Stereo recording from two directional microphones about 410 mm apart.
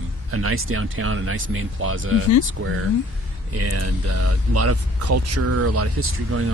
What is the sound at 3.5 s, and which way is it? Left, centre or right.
Speech, right.